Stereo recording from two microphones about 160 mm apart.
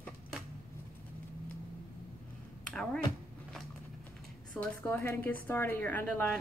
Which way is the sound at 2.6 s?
5° left (ahead or behind).